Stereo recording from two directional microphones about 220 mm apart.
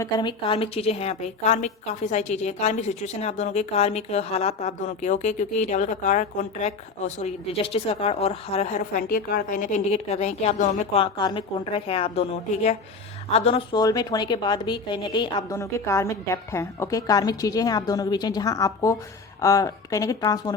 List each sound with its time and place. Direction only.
0.0 s a woman's voice: 20° left (ahead or behind)